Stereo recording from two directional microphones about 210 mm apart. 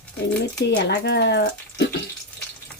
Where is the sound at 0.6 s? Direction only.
55° left (ahead or behind).